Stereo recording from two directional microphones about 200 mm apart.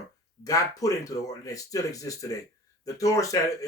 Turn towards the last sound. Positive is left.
turn(degrees=15)  # may be behind; listen again after turning